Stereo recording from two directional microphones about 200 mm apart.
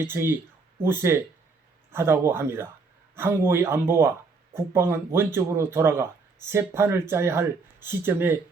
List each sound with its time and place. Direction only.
0.0 s speech: 10° right (ahead or behind)